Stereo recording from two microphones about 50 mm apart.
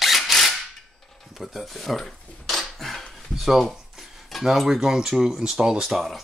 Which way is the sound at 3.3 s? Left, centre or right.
Centre.